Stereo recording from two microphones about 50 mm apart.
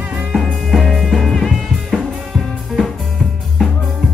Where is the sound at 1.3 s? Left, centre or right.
Centre.